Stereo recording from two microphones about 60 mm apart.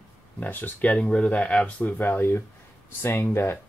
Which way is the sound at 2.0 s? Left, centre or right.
Left.